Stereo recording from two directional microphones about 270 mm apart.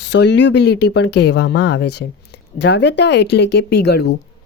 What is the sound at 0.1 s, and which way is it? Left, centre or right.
A woman's voice, left.